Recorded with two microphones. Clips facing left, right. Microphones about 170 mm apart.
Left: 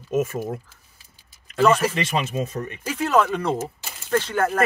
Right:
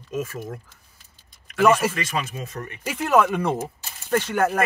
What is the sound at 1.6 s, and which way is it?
Speech, 10° right (ahead or behind).